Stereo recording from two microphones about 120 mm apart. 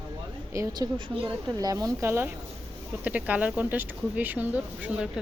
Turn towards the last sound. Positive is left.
turn(degrees=-5)  # may be behind; listen again after turning